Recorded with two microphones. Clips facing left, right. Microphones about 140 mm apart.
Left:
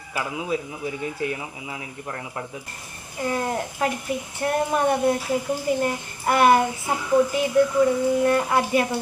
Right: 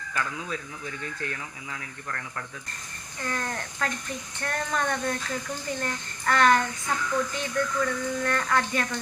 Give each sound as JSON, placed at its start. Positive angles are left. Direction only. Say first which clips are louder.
{"t": 0.1, "sound": "speech", "louder": "left 6 dB", "side_deg": 15}
{"t": 3.2, "sound": "speech", "louder": "left 7 dB", "side_deg": 10}
{"t": 7.0, "sound": "a sound", "louder": "left 10 dB", "side_deg": 30}
{"t": 7.3, "sound": "speech", "louder": "left 10 dB", "side_deg": 10}
{"t": 7.7, "sound": "a sound", "louder": "left 9 dB", "side_deg": 30}
{"t": 8.0, "sound": "speech", "louder": "left 8 dB", "side_deg": 10}